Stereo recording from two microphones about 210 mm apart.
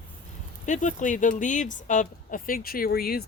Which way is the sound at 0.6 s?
35° left (ahead or behind).